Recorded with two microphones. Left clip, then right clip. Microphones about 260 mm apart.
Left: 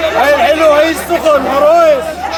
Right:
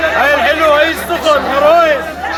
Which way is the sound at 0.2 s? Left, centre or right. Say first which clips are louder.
Left 4 dB; left.